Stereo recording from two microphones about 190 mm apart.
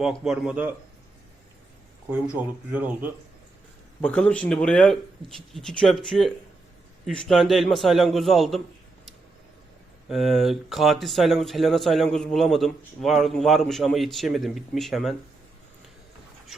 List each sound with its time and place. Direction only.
0.3 s speech: 5° right (ahead or behind)
2.0 s speech: 10° right (ahead or behind)
4.0 s speech: 5° left (ahead or behind)
10.1 s speech: centre (ahead or behind)